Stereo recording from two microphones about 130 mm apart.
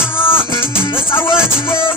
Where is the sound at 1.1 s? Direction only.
20° left (ahead or behind).